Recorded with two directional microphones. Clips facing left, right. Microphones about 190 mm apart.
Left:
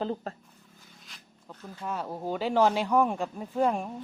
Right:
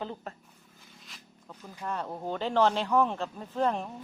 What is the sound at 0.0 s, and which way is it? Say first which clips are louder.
Speech: left 6 dB; 35° left (ahead or behind).